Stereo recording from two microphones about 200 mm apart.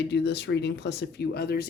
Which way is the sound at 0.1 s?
60° left (ahead or behind).